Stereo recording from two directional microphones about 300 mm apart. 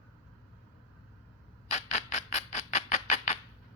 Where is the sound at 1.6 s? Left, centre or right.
Left.